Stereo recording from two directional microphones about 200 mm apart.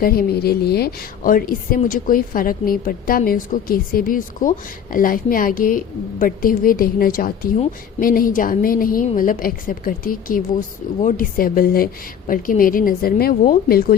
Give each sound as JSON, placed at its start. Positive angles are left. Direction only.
{"t": 0.0, "sound": "a woman's voice", "side_deg": 50}